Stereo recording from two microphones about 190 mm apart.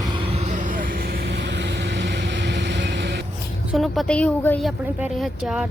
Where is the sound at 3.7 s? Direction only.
Centre (ahead or behind).